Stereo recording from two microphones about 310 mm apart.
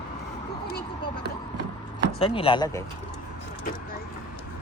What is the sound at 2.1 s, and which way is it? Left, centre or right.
Speech, centre.